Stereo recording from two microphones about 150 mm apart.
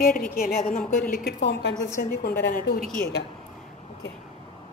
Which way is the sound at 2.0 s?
90° left.